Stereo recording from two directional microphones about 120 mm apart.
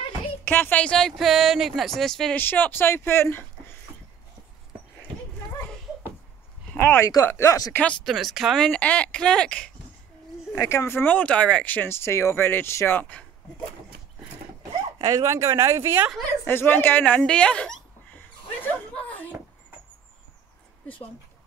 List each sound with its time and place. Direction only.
0.5 s speech: 15° left (ahead or behind)
2.3 s speech: 15° left (ahead or behind)
6.7 s speech: 15° left (ahead or behind)
7.7 s speech: 10° left (ahead or behind)
10.6 s speech: 25° left (ahead or behind)
15.0 s speech: 30° right (ahead or behind)
16.4 s speech: 15° left (ahead or behind)